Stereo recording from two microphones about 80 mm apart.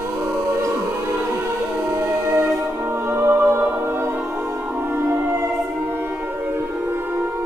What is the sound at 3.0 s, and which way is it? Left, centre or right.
Music, right.